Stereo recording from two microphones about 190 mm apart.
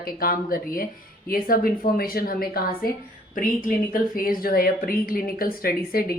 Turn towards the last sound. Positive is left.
turn(degrees=50)  # may be behind; listen again after turning